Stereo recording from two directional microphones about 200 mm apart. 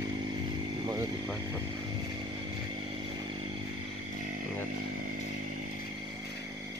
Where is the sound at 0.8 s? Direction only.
20° right (ahead or behind).